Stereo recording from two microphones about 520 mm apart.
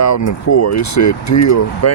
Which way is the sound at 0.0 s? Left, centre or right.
Left.